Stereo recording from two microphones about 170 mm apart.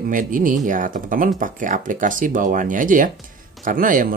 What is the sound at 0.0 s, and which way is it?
Speech, 55° right (ahead or behind).